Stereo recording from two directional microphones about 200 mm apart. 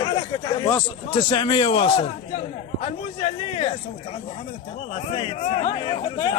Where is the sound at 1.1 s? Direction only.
25° left (ahead or behind).